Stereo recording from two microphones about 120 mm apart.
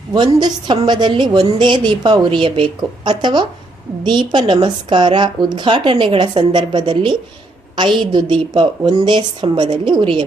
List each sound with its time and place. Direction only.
0.1 s a woman's voice: 35° right (ahead or behind)